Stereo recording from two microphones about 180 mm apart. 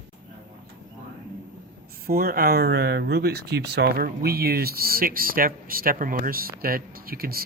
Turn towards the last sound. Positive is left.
turn(degrees=-55)  # may be behind; listen again after turning